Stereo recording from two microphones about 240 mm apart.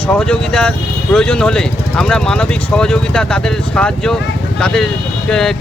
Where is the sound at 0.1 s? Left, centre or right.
Centre.